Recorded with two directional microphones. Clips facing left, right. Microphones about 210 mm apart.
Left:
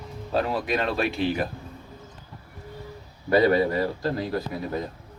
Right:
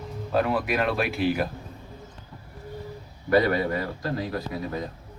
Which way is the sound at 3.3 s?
30° left (ahead or behind).